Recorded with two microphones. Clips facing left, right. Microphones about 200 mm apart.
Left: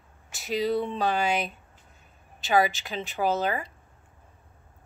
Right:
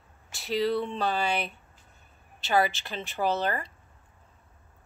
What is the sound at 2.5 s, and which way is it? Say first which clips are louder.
Speech: left 2 dB; 15° left (ahead or behind).